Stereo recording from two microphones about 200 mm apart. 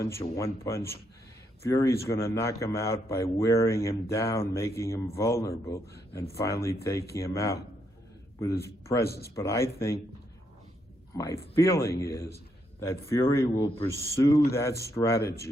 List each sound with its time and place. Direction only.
0.0 s a man's voice: 15° left (ahead or behind)
8.6 s a man's voice: 15° left (ahead or behind)
11.1 s a man's voice: 15° left (ahead or behind)